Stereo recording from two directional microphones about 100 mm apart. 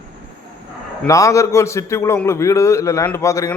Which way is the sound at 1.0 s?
35° left (ahead or behind).